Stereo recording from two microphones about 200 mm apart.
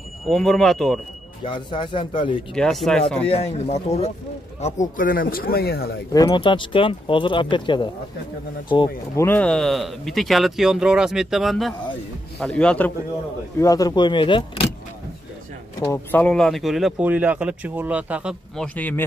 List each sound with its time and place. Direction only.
0.3 s speech: centre (ahead or behind)
1.4 s speech: 25° left (ahead or behind)
2.5 s speech: centre (ahead or behind)
3.3 s speech: 30° left (ahead or behind); by 5.9 s 50° left (ahead or behind)
6.1 s speech: 20° left (ahead or behind); by 12.9 s 5° left (ahead or behind)
13.6 s speech: 15° left (ahead or behind)
15.8 s speech: 10° left (ahead or behind); by 18.7 s 5° right (ahead or behind)
18.8 s speech: 10° left (ahead or behind)